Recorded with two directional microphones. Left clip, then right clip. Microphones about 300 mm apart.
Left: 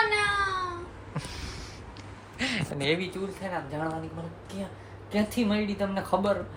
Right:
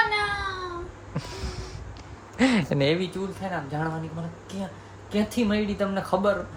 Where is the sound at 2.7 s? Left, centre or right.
Right.